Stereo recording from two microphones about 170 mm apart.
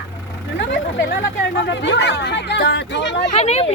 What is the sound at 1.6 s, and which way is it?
Speech, 90° left.